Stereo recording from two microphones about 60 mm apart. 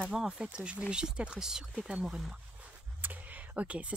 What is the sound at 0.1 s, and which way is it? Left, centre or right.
Speech, centre.